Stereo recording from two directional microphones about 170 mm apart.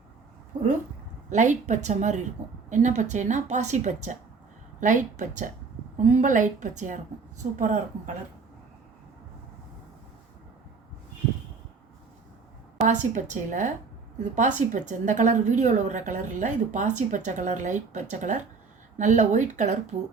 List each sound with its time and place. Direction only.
0.5 s a sound: 25° right (ahead or behind)
1.3 s a woman's voice: 45° right (ahead or behind)
12.7 s a woman's voice: 45° right (ahead or behind)